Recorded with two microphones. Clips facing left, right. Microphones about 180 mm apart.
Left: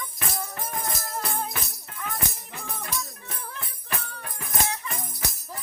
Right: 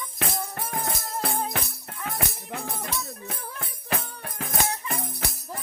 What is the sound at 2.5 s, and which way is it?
Music, 70° right (ahead or behind).